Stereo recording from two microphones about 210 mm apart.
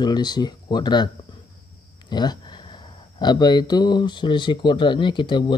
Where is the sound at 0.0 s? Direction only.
20° left (ahead or behind).